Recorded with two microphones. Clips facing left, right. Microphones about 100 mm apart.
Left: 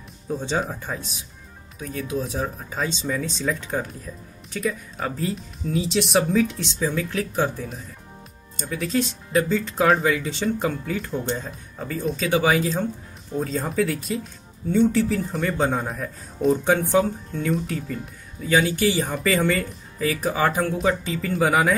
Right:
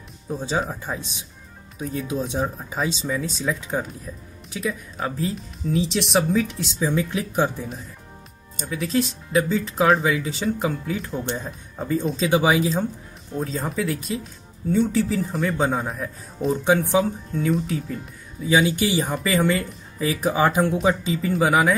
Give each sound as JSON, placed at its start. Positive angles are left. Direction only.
{"t": 0.3, "sound": "speech", "side_deg": -5}
{"t": 1.8, "sound": "speech", "side_deg": -25}
{"t": 2.4, "sound": "speech", "side_deg": -10}
{"t": 6.9, "sound": "speech", "side_deg": -15}
{"t": 8.5, "sound": "speech", "side_deg": -5}
{"t": 11.8, "sound": "speech", "side_deg": -20}
{"t": 13.3, "sound": "speech", "side_deg": 0}
{"t": 18.9, "sound": "speech", "side_deg": 0}
{"t": 20.0, "sound": "speech", "side_deg": -15}
{"t": 21.3, "sound": "speech", "side_deg": 0}